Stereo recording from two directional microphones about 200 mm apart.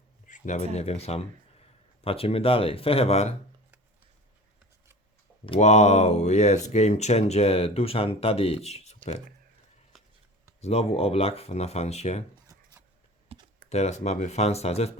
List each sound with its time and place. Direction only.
0.3 s speech: 40° left (ahead or behind)
5.5 s speech: 35° left (ahead or behind)
9.9 s a sound: centre (ahead or behind)
10.6 s speech: 30° left (ahead or behind)
13.3 s computer keyboard: 30° right (ahead or behind)
13.7 s speech: 35° left (ahead or behind)